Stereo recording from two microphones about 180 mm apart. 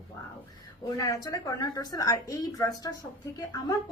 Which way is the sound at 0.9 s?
20° left (ahead or behind).